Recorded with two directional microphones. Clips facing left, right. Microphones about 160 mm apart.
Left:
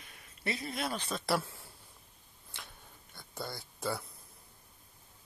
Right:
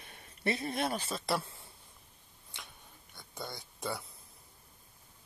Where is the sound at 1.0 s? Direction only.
Centre (ahead or behind).